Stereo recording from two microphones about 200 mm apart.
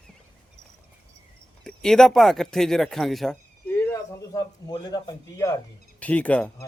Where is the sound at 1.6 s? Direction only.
5° left (ahead or behind).